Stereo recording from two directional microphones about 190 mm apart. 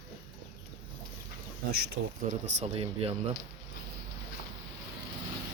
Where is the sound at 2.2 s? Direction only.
40° right (ahead or behind).